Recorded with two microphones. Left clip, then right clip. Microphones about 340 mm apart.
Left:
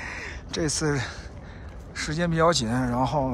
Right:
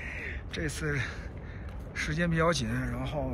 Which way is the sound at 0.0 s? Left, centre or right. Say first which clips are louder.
Left 3 dB; centre.